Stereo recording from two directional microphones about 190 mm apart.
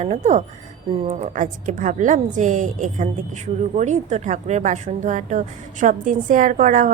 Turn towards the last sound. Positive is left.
turn(degrees=-45)  # may be behind; listen again after turning